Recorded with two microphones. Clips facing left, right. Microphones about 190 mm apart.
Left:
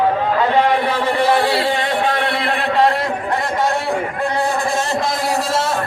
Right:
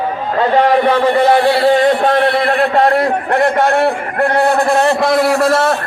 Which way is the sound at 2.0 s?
55° right (ahead or behind).